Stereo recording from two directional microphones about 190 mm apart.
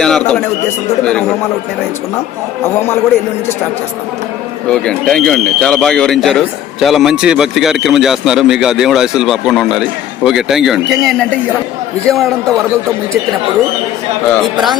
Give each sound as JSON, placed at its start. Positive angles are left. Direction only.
{"t": 0.0, "sound": "a man's voice", "side_deg": 5}
{"t": 4.7, "sound": "speech", "side_deg": 5}
{"t": 14.5, "sound": "speech", "side_deg": 0}